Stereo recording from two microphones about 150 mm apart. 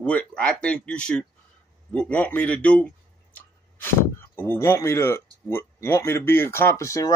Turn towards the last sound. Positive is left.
turn(degrees=20)  # may be behind; listen again after turning